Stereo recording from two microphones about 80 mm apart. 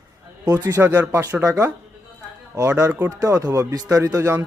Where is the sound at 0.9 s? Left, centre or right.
Right.